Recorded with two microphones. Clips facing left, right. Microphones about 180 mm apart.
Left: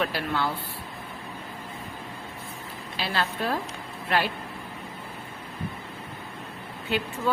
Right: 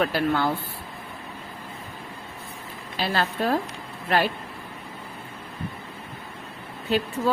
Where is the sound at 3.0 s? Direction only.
45° right (ahead or behind).